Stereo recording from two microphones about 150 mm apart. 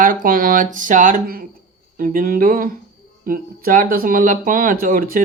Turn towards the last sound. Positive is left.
turn(degrees=-70)  # may be behind; listen again after turning